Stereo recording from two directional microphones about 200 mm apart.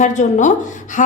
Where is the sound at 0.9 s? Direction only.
40° left (ahead or behind).